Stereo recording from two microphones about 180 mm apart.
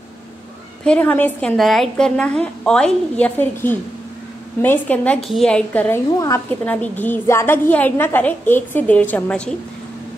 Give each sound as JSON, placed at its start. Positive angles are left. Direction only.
{"t": 0.8, "sound": "a woman's voice", "side_deg": 10}